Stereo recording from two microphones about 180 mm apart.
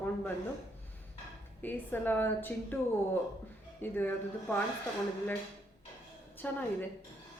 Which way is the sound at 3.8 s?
10° left (ahead or behind).